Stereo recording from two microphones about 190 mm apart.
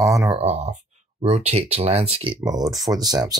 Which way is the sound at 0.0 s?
15° right (ahead or behind).